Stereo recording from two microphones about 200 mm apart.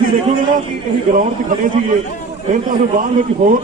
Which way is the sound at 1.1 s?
40° right (ahead or behind).